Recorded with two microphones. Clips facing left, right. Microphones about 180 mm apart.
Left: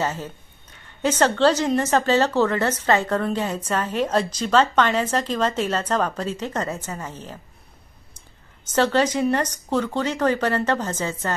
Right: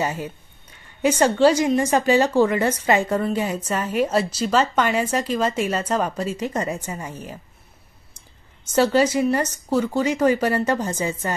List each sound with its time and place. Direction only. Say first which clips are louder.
0.0 s a woman's voice: right 1 dB; 15° right (ahead or behind)
8.7 s a woman's voice: right 2 dB; 10° right (ahead or behind)